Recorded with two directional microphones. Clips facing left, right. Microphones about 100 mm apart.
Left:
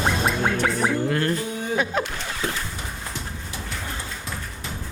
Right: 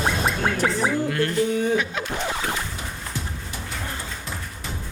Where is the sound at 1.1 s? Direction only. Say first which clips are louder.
Right 2 dB; 35° left (ahead or behind).